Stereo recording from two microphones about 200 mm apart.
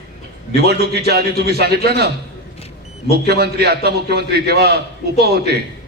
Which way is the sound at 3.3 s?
55° right (ahead or behind).